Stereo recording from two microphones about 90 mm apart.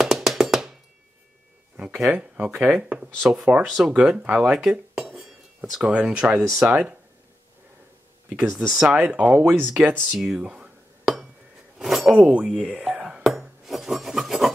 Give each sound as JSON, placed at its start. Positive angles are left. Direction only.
{"t": 0.0, "sound": "music", "side_deg": -5}
{"t": 2.0, "sound": "speech", "side_deg": -15}
{"t": 5.1, "sound": "a sound", "side_deg": -5}
{"t": 6.6, "sound": "speech", "side_deg": -10}
{"t": 8.5, "sound": "speech", "side_deg": -5}
{"t": 10.0, "sound": "dishes", "side_deg": -5}
{"t": 11.8, "sound": "a sound", "side_deg": 0}
{"t": 12.1, "sound": "speech", "side_deg": -15}
{"t": 12.7, "sound": "a sound", "side_deg": -10}